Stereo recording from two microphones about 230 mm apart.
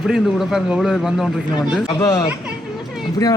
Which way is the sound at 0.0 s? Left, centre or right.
Centre.